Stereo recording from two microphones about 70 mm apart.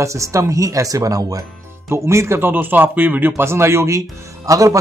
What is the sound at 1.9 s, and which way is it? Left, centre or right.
Speech, right.